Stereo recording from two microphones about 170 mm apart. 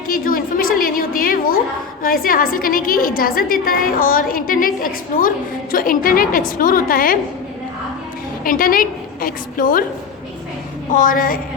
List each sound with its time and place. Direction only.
0.1 s a sound: 55° left (ahead or behind)
2.0 s a woman's voice: 60° left (ahead or behind)
8.4 s a woman's voice: 55° left (ahead or behind)
10.9 s a woman's voice: 55° left (ahead or behind)